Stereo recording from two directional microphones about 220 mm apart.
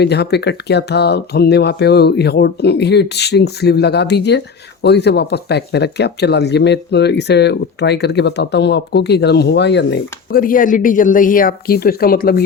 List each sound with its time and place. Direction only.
0.0 s speech: 50° left (ahead or behind)